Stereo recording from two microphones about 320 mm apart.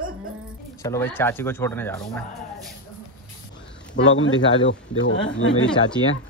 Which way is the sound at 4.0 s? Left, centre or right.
Left.